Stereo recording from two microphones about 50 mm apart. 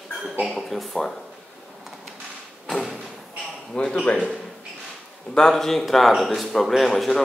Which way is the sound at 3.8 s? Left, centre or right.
Left.